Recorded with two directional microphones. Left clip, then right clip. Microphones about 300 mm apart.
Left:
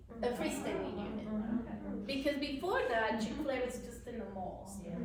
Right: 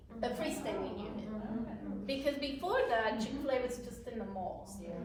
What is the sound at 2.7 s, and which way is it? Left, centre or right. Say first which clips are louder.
Speech: right 1 dB; centre.